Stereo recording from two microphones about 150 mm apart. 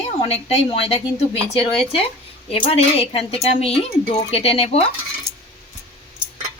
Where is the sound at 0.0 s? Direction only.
45° left (ahead or behind).